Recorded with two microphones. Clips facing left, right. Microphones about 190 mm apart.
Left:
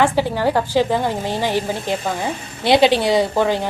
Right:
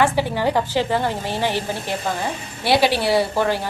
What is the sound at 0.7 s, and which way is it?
A woman's voice, 15° left (ahead or behind).